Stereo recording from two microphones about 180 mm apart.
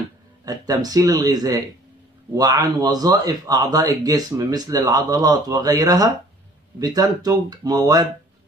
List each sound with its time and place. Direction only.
0.5 s speech: 20° right (ahead or behind)